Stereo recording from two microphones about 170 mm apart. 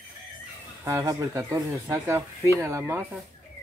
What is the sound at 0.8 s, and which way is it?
Speech, 15° right (ahead or behind).